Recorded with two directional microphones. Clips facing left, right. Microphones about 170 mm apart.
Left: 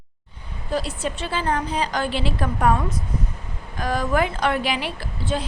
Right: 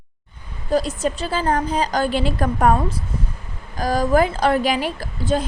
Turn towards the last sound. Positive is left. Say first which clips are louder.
# right 5 dB
turn(degrees=-40)  # may be behind; listen again after turning